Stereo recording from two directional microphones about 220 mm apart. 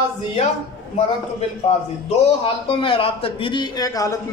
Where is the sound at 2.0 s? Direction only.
25° left (ahead or behind).